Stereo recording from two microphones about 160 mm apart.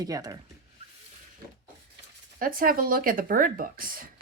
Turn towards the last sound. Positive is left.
turn(degrees=-60)  # may be behind; listen again after turning